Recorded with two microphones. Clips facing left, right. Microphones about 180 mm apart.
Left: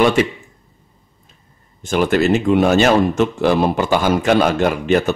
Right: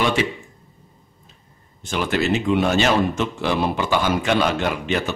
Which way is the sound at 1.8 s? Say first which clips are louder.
Left 7 dB; 50° left (ahead or behind).